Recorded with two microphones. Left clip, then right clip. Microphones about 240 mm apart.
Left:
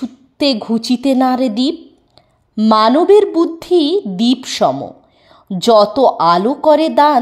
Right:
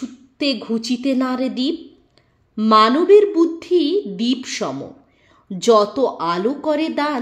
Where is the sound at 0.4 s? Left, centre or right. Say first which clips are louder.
Left 6 dB; left.